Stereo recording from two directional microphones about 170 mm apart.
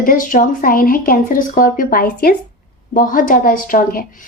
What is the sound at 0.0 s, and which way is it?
A woman's voice, 55° left (ahead or behind).